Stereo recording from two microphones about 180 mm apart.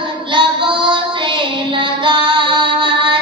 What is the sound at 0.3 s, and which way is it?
Child singing, 25° right (ahead or behind).